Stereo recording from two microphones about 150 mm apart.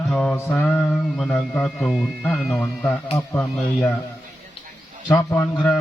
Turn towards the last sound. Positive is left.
turn(degrees=15)  # may be behind; listen again after turning